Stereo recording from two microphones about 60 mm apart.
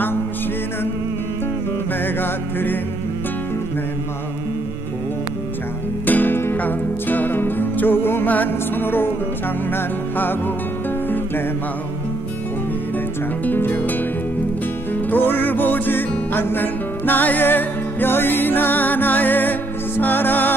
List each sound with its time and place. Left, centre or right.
2.0 s music: left
6.0 s music: left
13.5 s music: left
15.0 s music: left